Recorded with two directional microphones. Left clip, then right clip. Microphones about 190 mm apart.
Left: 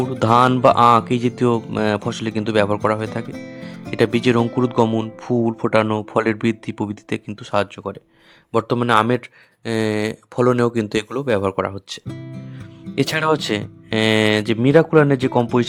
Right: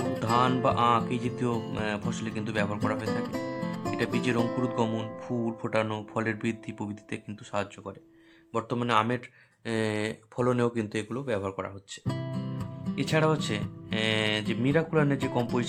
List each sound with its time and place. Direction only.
0.2 s speech: 50° left (ahead or behind)
9.6 s speech: 35° left (ahead or behind)
13.0 s speech: 50° left (ahead or behind)